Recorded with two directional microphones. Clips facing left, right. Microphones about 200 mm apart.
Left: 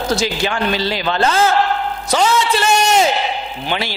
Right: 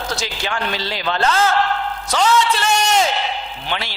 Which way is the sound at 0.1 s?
5° left (ahead or behind).